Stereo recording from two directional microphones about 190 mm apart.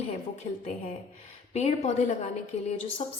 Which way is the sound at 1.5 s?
35° left (ahead or behind).